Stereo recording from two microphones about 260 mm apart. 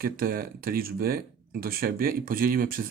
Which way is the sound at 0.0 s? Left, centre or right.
Right.